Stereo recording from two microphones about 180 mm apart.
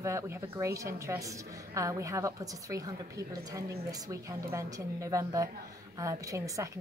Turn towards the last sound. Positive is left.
turn(degrees=-15)  # may be behind; listen again after turning